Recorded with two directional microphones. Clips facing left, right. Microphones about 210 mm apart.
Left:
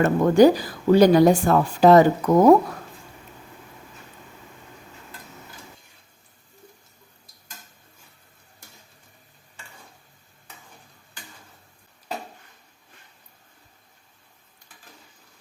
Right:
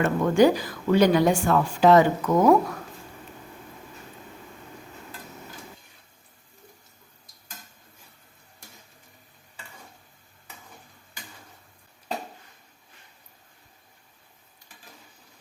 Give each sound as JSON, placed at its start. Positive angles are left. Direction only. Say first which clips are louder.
{"t": 0.0, "sound": "speech", "louder": "left 4 dB", "side_deg": 35}